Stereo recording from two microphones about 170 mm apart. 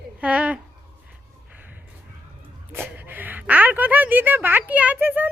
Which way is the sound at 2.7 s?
10° right (ahead or behind).